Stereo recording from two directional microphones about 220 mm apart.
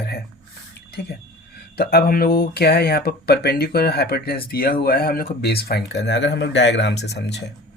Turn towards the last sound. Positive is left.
turn(degrees=50)  # may be behind; listen again after turning